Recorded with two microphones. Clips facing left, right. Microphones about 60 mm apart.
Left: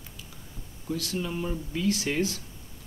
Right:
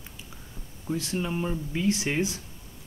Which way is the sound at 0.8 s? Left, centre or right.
Right.